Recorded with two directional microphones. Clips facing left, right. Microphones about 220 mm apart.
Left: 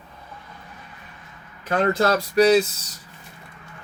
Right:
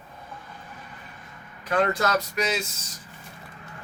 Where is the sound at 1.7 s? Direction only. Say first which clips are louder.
Left 3 dB; 30° left (ahead or behind).